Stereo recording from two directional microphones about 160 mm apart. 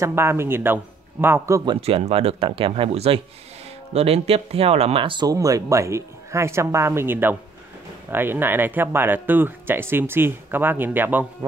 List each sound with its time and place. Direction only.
0.0 s speech: 15° right (ahead or behind)
1.7 s speech: 35° right (ahead or behind); by 11.2 s 10° right (ahead or behind)